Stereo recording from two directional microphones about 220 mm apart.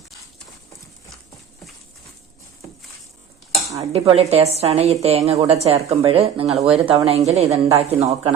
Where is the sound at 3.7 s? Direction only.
30° right (ahead or behind).